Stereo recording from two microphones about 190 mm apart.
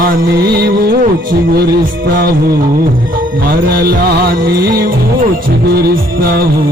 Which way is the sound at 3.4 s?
50° right (ahead or behind).